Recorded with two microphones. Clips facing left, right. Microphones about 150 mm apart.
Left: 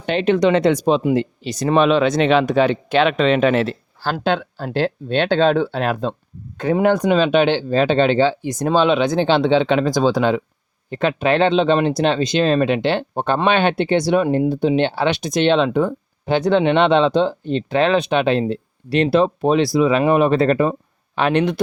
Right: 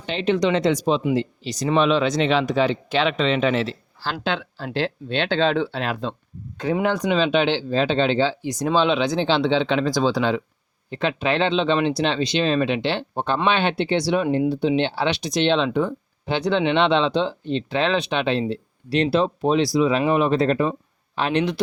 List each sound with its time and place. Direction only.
0.0 s speech: 60° left (ahead or behind)